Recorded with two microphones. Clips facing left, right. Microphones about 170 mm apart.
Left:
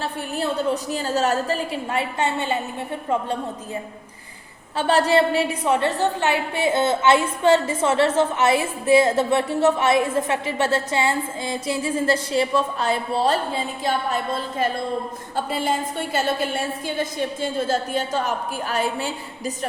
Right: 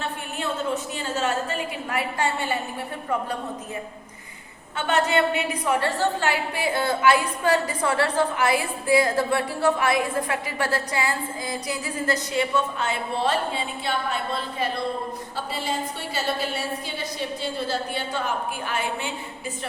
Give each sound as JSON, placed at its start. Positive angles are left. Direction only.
{"t": 0.0, "sound": "a woman's voice", "side_deg": 35}
{"t": 4.8, "sound": "a woman's voice", "side_deg": 35}